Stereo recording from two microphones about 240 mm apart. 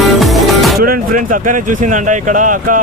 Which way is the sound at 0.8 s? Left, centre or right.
Right.